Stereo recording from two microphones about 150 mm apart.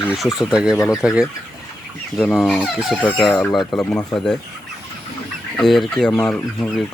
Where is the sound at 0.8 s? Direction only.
20° left (ahead or behind).